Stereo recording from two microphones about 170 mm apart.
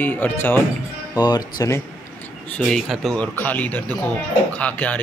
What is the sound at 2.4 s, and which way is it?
Speech, 5° left (ahead or behind).